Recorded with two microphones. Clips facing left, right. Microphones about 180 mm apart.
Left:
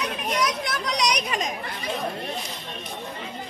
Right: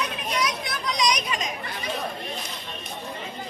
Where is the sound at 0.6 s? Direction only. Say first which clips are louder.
Even; 70° left (ahead or behind).